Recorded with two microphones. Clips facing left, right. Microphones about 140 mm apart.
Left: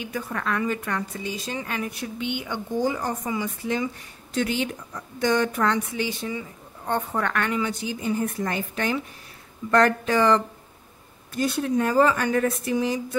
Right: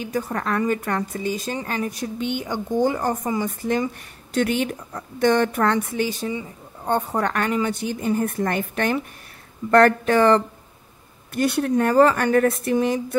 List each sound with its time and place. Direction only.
0.0 s a woman's voice: 40° right (ahead or behind)
2.8 s a woman's voice: 55° right (ahead or behind)
7.7 s speech: 55° right (ahead or behind)
11.3 s speech: 65° right (ahead or behind)